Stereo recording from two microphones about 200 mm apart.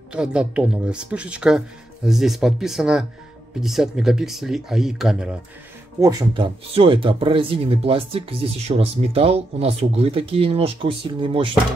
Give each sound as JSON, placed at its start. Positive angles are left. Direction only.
{"t": 0.1, "sound": "speech", "side_deg": -5}
{"t": 5.9, "sound": "speech", "side_deg": -15}